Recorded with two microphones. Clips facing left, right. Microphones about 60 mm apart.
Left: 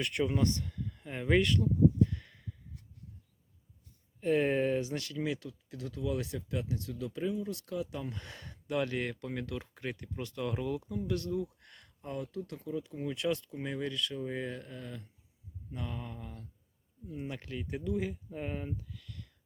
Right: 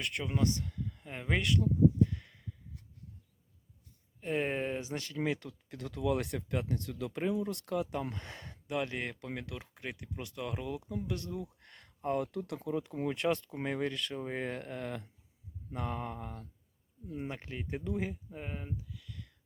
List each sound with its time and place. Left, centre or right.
0.0 s speech: centre
0.3 s speech: centre
2.1 s a sound: centre
4.2 s speech: centre; by 8.0 s right
8.1 s speech: right; by 10.8 s centre
11.0 s speech: right
11.6 s a sound: right
12.0 s speech: right
13.1 s speech: right
14.1 s speech: right
15.7 s speech: right
17.2 s speech: right
18.3 s speech: centre